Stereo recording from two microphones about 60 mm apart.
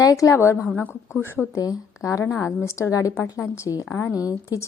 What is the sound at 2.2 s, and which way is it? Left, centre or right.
Speech, left.